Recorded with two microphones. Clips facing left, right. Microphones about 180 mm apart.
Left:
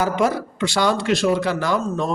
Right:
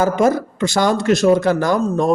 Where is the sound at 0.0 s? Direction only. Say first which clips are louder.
Right 5 dB; 45° right (ahead or behind).